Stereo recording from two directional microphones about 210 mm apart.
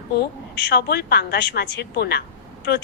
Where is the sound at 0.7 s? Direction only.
50° left (ahead or behind).